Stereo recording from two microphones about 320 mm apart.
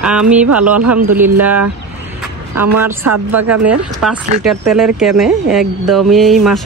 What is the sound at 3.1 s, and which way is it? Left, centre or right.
Speech, right.